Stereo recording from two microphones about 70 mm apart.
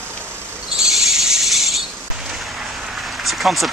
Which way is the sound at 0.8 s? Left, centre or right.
Centre.